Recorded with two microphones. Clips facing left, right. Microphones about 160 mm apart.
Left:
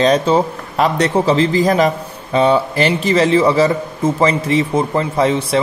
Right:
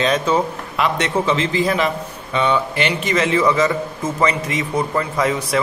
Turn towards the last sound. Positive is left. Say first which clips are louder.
# left 4 dB
turn(degrees=30)  # may be behind; listen again after turning